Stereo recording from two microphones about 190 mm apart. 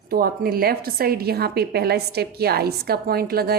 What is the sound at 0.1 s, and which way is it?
A woman's voice, 50° right (ahead or behind).